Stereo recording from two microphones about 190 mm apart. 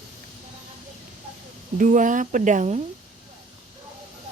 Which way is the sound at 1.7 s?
40° right (ahead or behind).